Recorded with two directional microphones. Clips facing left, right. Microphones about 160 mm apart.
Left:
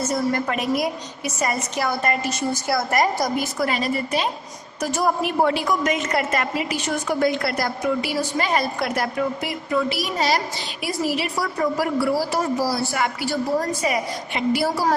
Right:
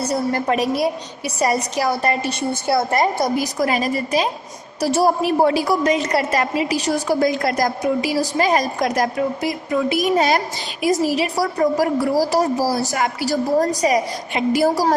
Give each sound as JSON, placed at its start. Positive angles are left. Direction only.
{"t": 0.0, "sound": "a woman's voice", "side_deg": -35}
{"t": 3.3, "sound": "a woman's voice", "side_deg": -40}